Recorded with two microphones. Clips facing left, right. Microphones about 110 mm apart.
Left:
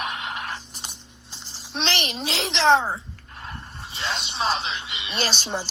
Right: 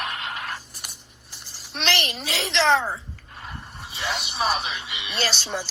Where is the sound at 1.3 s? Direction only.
20° left (ahead or behind).